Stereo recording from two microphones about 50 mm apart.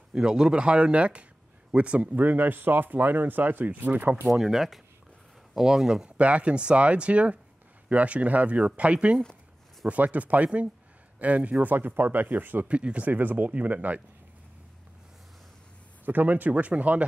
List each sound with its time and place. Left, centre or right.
0.1 s speech: centre
2.1 s speech: right
4.3 s speech: centre
6.0 s speech: right
11.6 s speech: right
12.6 s speech: right
16.1 s speech: right